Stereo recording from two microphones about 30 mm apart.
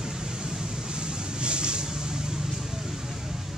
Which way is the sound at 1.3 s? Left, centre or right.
Right.